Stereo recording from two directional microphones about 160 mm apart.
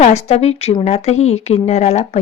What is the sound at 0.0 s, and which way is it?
Speech, 40° left (ahead or behind).